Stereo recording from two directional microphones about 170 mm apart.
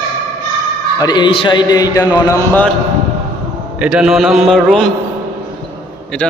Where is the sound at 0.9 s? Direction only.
25° left (ahead or behind).